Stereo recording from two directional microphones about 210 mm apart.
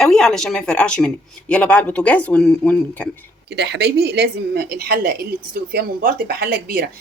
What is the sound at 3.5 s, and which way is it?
A woman's voice, 55° right (ahead or behind).